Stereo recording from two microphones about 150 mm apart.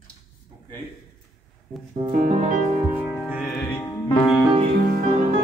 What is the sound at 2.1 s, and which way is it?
Music, 55° right (ahead or behind).